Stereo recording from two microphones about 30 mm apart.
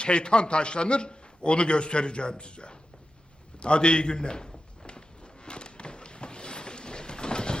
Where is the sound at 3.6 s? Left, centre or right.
Left.